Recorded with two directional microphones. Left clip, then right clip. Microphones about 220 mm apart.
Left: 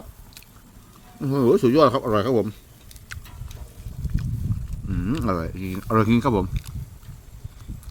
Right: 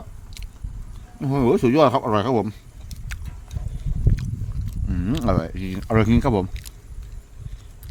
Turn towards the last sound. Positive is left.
turn(degrees=-15)  # may be behind; listen again after turning